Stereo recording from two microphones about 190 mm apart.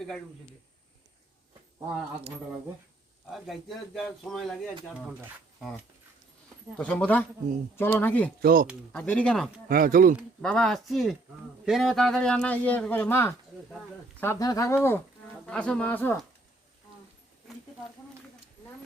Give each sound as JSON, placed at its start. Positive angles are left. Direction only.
{"t": 3.2, "sound": "speech", "side_deg": 0}
{"t": 6.7, "sound": "speech", "side_deg": 5}
{"t": 8.4, "sound": "speech", "side_deg": -50}
{"t": 8.9, "sound": "speech", "side_deg": 5}
{"t": 9.6, "sound": "speech", "side_deg": -50}
{"t": 10.2, "sound": "speech", "side_deg": 5}